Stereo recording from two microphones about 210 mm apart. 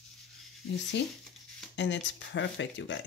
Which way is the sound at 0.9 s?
60° left (ahead or behind).